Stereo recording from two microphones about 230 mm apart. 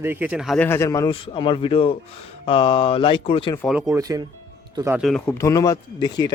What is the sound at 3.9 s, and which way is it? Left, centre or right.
Speech, centre.